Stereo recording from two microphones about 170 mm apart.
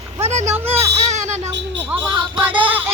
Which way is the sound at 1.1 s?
45° right (ahead or behind).